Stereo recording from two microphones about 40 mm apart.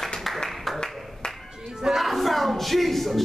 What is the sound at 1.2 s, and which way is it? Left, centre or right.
Clapping, left.